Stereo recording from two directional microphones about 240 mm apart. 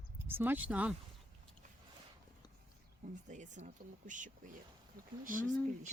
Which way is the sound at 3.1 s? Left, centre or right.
Right.